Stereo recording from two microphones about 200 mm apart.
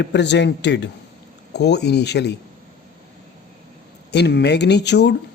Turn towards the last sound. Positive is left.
turn(degrees=60)  # may be behind; listen again after turning